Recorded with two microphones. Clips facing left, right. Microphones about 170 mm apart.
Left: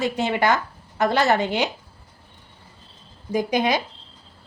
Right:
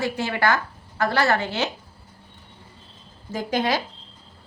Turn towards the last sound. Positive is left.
turn(degrees=15)  # may be behind; listen again after turning